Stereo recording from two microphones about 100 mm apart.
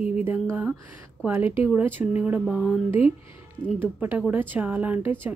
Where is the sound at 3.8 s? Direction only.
20° right (ahead or behind).